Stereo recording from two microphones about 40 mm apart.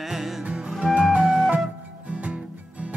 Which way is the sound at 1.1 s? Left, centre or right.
Centre.